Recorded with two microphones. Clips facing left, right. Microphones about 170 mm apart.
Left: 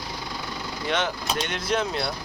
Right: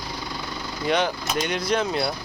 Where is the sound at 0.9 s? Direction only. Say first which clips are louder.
Right 3 dB; centre (ahead or behind).